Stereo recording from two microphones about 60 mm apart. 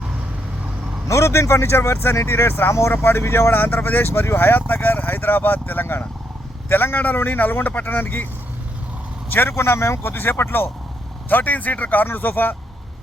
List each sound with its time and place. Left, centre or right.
1.0 s speech: left
9.3 s speech: left